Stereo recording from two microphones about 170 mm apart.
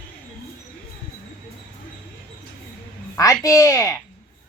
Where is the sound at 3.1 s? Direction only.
20° left (ahead or behind).